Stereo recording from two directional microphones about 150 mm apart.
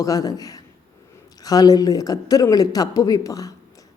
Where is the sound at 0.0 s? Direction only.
25° left (ahead or behind).